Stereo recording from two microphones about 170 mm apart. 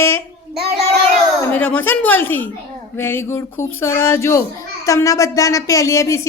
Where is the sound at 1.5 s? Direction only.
10° left (ahead or behind).